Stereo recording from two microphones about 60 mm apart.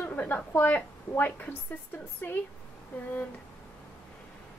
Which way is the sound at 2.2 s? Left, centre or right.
Left.